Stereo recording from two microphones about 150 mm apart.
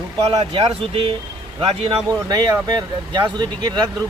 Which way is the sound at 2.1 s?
25° right (ahead or behind).